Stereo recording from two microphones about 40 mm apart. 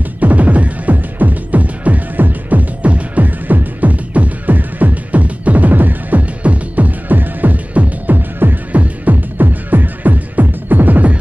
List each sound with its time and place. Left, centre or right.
0.2 s music: right
8.7 s music: right